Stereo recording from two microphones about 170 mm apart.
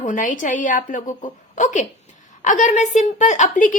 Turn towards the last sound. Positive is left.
turn(degrees=50)  # may be behind; listen again after turning